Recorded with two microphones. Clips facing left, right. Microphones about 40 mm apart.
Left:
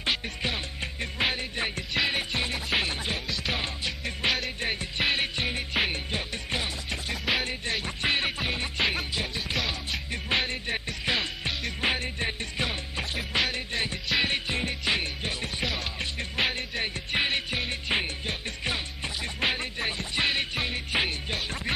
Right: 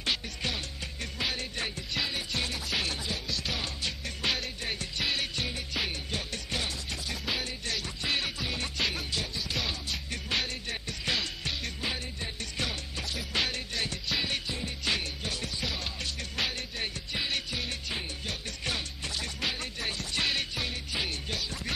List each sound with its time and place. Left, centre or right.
0.0 s music: left
0.7 s music: left
1.3 s music: left
11.8 s music: left
12.5 s music: left
14.5 s music: left
14.9 s music: left
15.6 s music: centre
16.0 s music: left
18.2 s music: left